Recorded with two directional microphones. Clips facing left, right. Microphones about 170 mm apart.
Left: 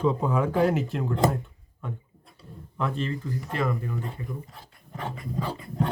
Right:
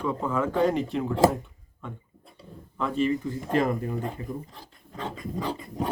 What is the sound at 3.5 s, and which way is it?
Speech, 40° right (ahead or behind).